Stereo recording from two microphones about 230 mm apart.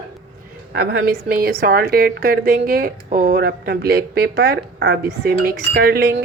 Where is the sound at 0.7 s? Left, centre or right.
Right.